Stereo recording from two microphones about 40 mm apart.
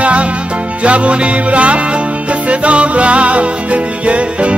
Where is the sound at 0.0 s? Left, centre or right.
Right.